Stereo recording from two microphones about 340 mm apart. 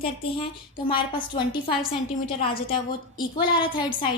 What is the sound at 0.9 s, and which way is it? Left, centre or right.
A woman's voice, centre.